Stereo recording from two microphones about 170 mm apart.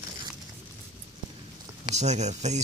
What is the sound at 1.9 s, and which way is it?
Speech, 40° right (ahead or behind).